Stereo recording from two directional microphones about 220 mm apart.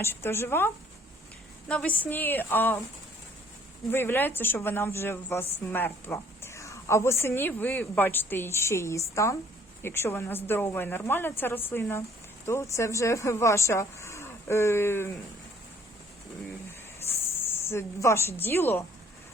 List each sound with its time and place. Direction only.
0.0 s a woman's voice: 10° left (ahead or behind)
3.9 s a woman's voice: 10° left (ahead or behind)
17.0 s a sound: 30° left (ahead or behind)
17.4 s speech: 10° left (ahead or behind)